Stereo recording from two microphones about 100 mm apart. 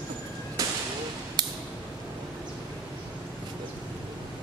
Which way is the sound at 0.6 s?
35° right (ahead or behind).